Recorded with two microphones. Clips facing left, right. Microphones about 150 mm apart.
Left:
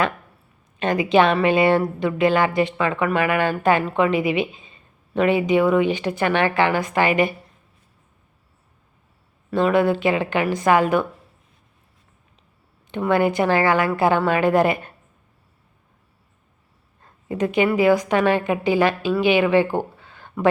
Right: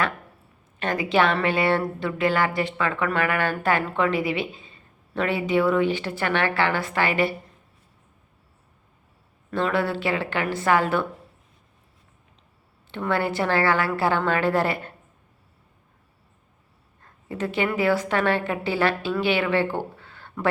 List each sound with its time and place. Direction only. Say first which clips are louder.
0.8 s speech: left 5 dB; 20° left (ahead or behind)
9.5 s speech: left 6 dB; 15° left (ahead or behind)
12.9 s speech: left 6 dB; 15° left (ahead or behind)
17.2 s speech: left 6 dB; 15° left (ahead or behind)